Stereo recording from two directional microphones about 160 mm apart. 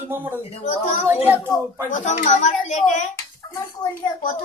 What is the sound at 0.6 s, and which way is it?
A woman's voice, 50° left (ahead or behind).